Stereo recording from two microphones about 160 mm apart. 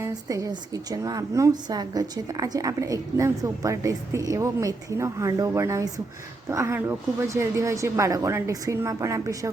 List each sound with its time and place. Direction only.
0.0 s a woman's voice: 20° right (ahead or behind)